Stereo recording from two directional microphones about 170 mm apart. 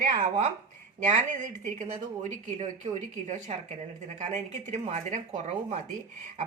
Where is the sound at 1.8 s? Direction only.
45° right (ahead or behind).